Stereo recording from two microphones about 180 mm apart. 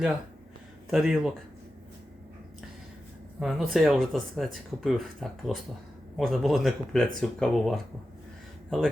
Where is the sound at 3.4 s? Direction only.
Centre (ahead or behind).